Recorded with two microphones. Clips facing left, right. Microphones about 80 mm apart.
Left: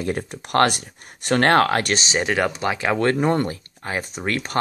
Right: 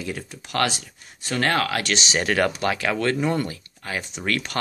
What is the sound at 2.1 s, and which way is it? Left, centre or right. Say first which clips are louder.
Speech: even; centre.